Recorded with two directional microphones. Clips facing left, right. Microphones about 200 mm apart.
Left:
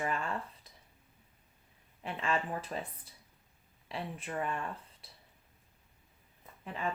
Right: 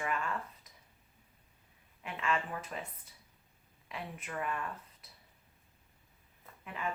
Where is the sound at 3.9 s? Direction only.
30° left (ahead or behind).